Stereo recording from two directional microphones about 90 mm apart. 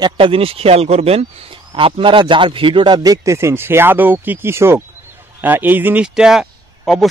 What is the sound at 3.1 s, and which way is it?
Speech, 35° right (ahead or behind).